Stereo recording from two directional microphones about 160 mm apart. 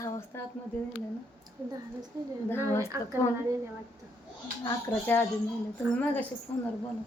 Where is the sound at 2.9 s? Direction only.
15° right (ahead or behind).